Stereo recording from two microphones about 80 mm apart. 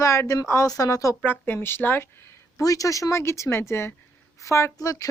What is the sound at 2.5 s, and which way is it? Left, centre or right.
A woman's voice, left.